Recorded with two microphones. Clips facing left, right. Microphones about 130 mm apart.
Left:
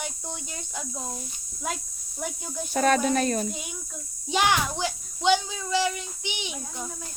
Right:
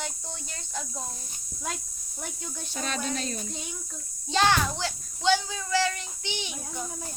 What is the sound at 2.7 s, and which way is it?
Speech, 55° left (ahead or behind).